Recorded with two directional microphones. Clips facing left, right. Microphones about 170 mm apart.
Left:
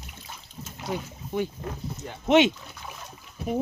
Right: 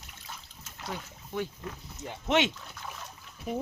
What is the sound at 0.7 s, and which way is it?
Speech, 15° left (ahead or behind).